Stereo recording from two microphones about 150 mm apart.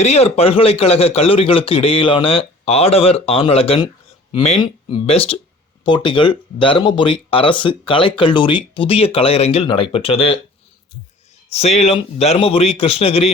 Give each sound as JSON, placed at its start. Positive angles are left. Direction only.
{"t": 0.0, "sound": "speech", "side_deg": 45}
{"t": 11.5, "sound": "speech", "side_deg": 45}